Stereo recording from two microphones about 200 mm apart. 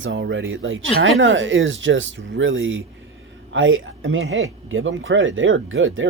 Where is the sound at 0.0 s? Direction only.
70° right (ahead or behind).